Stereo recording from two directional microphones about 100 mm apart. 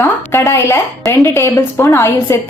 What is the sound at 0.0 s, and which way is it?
A woman's voice, 25° left (ahead or behind).